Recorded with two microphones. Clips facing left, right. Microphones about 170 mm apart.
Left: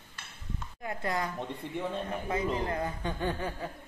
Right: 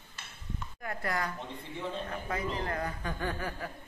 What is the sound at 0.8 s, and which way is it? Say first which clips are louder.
A man's voice: left 2 dB; 20° left (ahead or behind).